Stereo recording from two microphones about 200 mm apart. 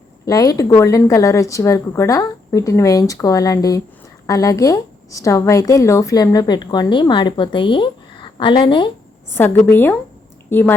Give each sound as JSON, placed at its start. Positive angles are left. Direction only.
{"t": 0.3, "sound": "a woman's voice", "side_deg": 15}
{"t": 9.6, "sound": "a woman's voice", "side_deg": 10}